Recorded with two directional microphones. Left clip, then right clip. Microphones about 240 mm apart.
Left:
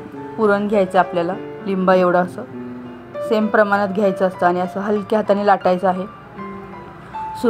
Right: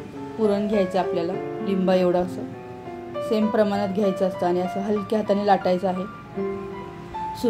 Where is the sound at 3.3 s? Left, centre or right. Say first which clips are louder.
Left 7 dB; centre.